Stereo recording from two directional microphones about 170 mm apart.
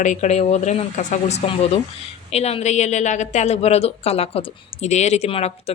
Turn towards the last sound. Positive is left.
turn(degrees=35)  # may be behind; listen again after turning